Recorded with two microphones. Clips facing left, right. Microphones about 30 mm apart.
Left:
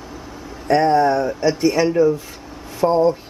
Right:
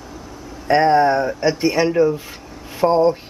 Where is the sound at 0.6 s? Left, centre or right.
Right.